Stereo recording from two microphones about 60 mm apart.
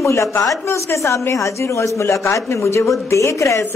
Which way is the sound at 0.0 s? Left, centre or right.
Left.